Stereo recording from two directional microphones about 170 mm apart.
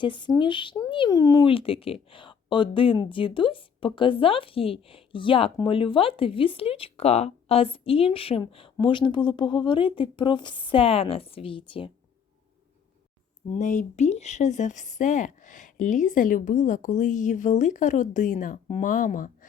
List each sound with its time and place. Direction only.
0.0 s speech: 30° left (ahead or behind)
13.5 s speech: 45° left (ahead or behind)